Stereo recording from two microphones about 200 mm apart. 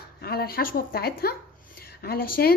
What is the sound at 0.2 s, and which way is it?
A woman's voice, 50° left (ahead or behind).